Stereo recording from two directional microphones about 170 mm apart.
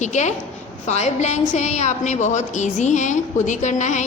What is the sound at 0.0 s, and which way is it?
A woman's voice, 45° left (ahead or behind).